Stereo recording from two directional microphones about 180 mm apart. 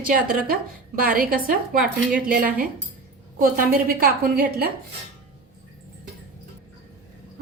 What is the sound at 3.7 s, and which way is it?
A woman's voice, 55° right (ahead or behind).